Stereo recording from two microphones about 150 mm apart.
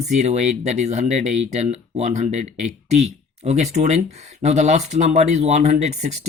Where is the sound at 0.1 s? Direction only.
50° right (ahead or behind).